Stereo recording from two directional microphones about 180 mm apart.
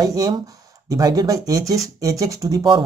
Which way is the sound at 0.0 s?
20° right (ahead or behind).